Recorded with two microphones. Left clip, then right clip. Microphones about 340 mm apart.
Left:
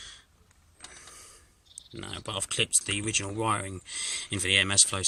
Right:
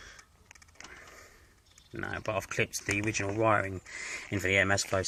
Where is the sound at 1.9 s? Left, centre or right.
Centre.